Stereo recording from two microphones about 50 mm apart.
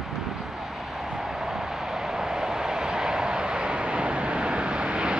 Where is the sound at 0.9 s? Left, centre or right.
Centre.